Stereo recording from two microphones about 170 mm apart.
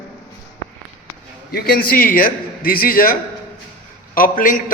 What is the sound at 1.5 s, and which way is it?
A man's voice, 60° left (ahead or behind).